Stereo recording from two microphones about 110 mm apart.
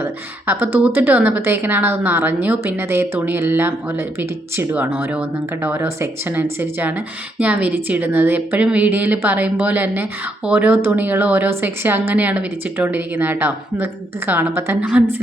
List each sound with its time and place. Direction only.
0.0 s a woman's voice: 20° right (ahead or behind)